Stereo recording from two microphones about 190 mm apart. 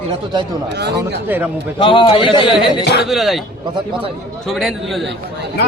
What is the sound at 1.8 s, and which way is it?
Speech, 25° left (ahead or behind).